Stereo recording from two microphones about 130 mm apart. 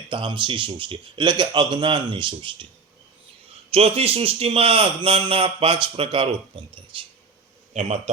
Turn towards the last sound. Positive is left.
turn(degrees=-65)  # may be behind; listen again after turning